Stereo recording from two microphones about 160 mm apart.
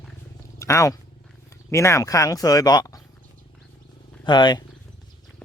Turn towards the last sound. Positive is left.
turn(degrees=30)  # may be behind; listen again after turning